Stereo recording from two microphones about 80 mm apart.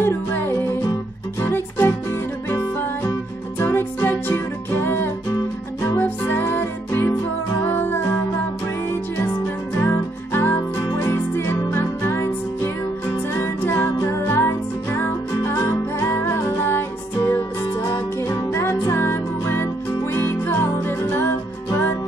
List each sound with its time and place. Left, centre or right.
0.0 s music: left
5.3 s music: left
5.9 s music: left
9.2 s music: left
13.3 s music: left